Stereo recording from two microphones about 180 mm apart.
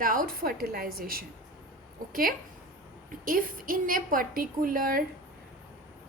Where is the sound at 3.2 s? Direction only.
50° right (ahead or behind).